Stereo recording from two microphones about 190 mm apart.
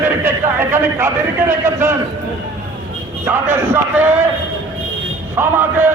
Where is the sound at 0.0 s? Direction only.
15° right (ahead or behind).